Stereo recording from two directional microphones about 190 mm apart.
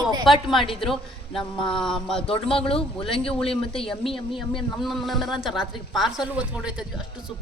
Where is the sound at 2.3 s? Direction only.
30° left (ahead or behind).